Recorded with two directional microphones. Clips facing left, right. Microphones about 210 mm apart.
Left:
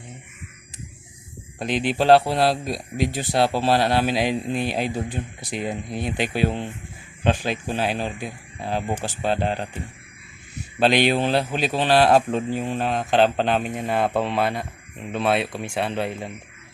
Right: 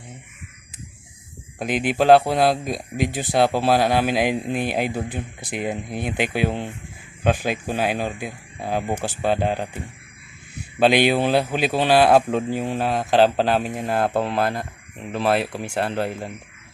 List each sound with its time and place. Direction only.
1.5 s a man's voice: 5° right (ahead or behind)
2.6 s speech: 50° right (ahead or behind)
3.2 s speech: 15° right (ahead or behind)
4.5 s speech: 50° right (ahead or behind)
4.8 s speech: 10° right (ahead or behind)
10.8 s a man's voice: 10° right (ahead or behind)